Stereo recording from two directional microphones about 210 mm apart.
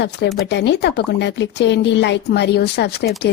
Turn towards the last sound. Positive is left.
turn(degrees=50)  # may be behind; listen again after turning